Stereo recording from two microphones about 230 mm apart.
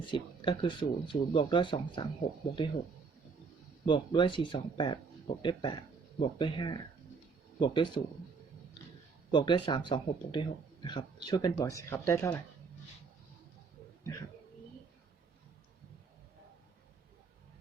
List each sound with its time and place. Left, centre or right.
0.0 s a man's voice: left
3.8 s a man's voice: left
9.3 s a man's voice: centre